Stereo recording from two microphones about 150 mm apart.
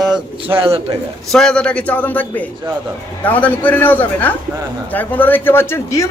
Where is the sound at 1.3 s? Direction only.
5° left (ahead or behind).